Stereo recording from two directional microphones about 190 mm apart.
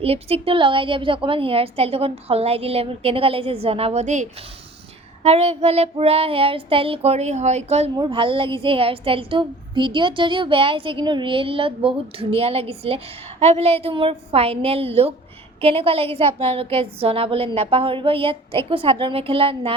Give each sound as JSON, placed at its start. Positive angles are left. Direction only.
{"t": 0.0, "sound": "a woman's voice", "side_deg": -30}